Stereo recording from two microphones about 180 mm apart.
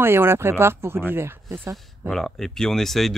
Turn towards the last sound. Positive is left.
turn(degrees=0)  # may be behind; listen again after turning